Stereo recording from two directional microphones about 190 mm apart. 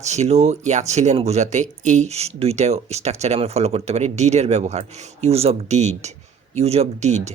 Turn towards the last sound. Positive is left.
turn(degrees=-35)  # may be behind; listen again after turning